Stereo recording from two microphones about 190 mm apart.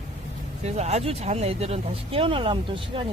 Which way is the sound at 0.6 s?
35° right (ahead or behind).